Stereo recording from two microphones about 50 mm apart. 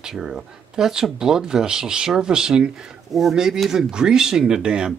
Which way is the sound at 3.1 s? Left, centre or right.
Centre.